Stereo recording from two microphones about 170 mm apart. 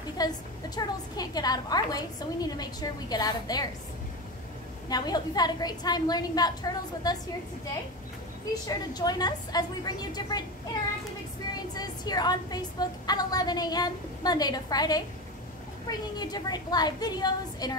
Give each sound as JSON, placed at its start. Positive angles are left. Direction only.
{"t": 0.2, "sound": "a woman's voice", "side_deg": 25}
{"t": 4.8, "sound": "a woman's voice", "side_deg": 25}
{"t": 8.6, "sound": "a woman's voice", "side_deg": 25}
{"t": 11.7, "sound": "a woman's voice", "side_deg": 25}
{"t": 16.2, "sound": "a woman's voice", "side_deg": 25}